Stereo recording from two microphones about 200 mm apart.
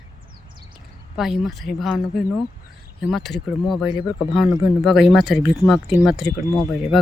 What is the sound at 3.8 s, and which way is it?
Speech, 25° left (ahead or behind).